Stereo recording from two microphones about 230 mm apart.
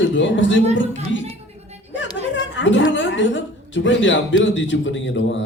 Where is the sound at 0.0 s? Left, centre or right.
Left.